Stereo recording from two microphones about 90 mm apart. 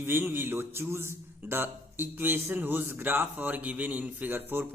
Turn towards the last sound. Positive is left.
turn(degrees=-25)  # may be behind; listen again after turning